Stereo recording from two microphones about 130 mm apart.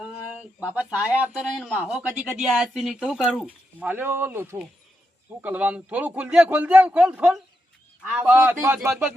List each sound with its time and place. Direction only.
0.6 s speech: 10° right (ahead or behind)